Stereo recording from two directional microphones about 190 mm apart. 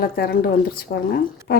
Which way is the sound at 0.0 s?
50° left (ahead or behind).